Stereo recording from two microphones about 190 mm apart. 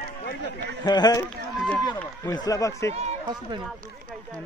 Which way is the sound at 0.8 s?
20° left (ahead or behind).